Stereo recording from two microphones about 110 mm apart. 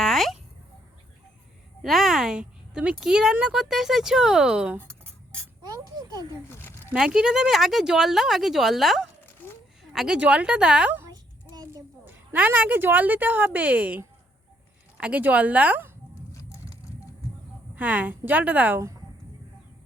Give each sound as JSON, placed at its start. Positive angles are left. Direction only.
{"t": 0.0, "sound": "a sound", "side_deg": 0}
{"t": 1.8, "sound": "speech", "side_deg": 0}
{"t": 5.6, "sound": "speech", "side_deg": -35}
{"t": 6.5, "sound": "speech", "side_deg": 20}
{"t": 6.9, "sound": "speech", "side_deg": -5}
{"t": 9.4, "sound": "a sound", "side_deg": 15}
{"t": 9.9, "sound": "speech", "side_deg": -5}
{"t": 11.1, "sound": "a sound", "side_deg": -35}
{"t": 12.0, "sound": "speech", "side_deg": -15}
{"t": 17.7, "sound": "speech", "side_deg": -15}